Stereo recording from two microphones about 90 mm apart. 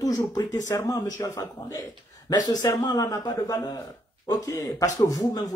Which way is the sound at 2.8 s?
45° left (ahead or behind).